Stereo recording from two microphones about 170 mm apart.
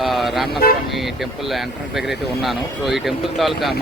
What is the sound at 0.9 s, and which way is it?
Speech, centre (ahead or behind).